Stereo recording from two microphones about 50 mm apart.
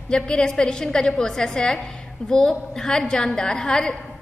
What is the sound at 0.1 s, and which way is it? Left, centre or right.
A woman's voice, centre.